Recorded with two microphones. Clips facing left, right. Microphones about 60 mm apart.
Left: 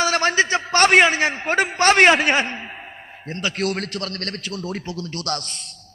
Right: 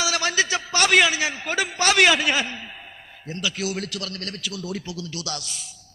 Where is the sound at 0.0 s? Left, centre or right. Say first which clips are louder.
Left 5 dB; left.